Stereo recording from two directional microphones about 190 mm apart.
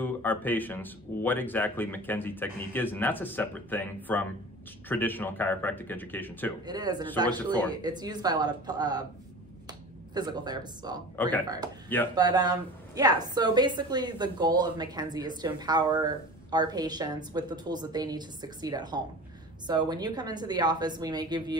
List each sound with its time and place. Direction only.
0.0 s speech: 10° left (ahead or behind)
6.6 s speech: 20° right (ahead or behind)
11.1 s speech: 10° left (ahead or behind)
11.4 s speech: 20° right (ahead or behind)